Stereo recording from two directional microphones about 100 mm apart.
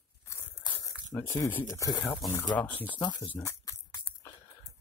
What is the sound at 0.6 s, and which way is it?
Crumpling, 50° left (ahead or behind).